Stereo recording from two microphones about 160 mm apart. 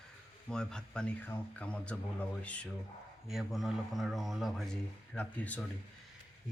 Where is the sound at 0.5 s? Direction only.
5° left (ahead or behind).